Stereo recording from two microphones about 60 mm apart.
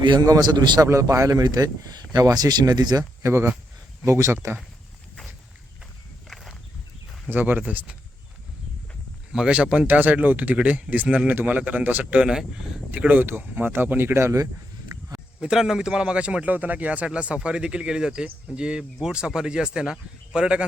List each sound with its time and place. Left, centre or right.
0.9 s speech: right
3.2 s speech: right
6.2 s walk: centre
7.3 s speech: right
9.3 s speech: centre
12.2 s speech: centre
12.9 s speech: right
14.9 s a sound: right
15.4 s speech: centre